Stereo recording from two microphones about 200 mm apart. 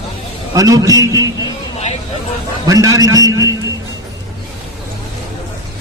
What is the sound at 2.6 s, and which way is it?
Speech, 15° right (ahead or behind).